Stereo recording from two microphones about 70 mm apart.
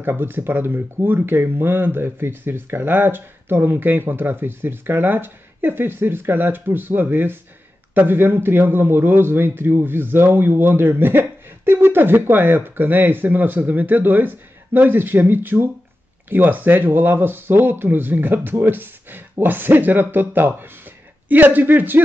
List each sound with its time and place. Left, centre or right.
0.0 s a man's voice: right